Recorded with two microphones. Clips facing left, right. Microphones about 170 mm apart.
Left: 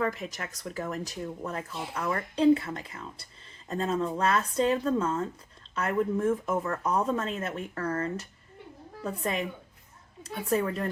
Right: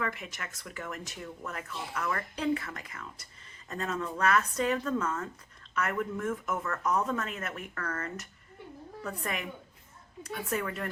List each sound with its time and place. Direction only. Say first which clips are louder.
0.0 s speech: left 5 dB; 35° left (ahead or behind)